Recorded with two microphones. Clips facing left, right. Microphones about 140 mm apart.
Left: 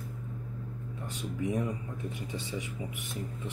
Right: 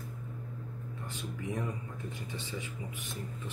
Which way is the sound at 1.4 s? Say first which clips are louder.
Left 6 dB; 15° left (ahead or behind).